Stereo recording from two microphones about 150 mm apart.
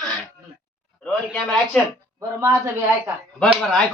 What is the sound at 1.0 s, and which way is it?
Speech, 5° left (ahead or behind).